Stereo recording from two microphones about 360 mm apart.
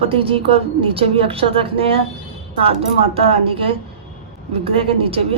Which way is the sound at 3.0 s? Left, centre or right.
Centre.